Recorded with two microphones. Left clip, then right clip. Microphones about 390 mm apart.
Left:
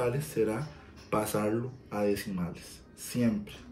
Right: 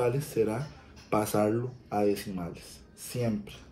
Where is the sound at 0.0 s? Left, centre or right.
Centre.